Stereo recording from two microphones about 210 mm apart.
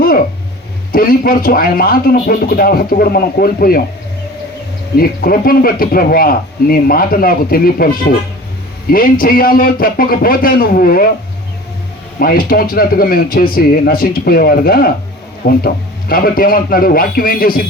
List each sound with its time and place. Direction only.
0.9 s speech: 45° left (ahead or behind)
4.9 s speech: 45° left (ahead or behind)
12.2 s speech: 45° left (ahead or behind)